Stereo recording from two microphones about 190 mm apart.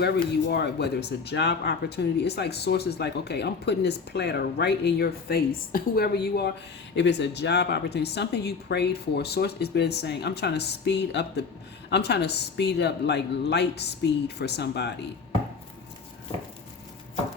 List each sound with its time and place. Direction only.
0.5 s speech: 60° left (ahead or behind)